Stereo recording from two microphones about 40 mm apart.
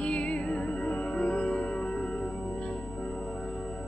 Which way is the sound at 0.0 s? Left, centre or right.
Left.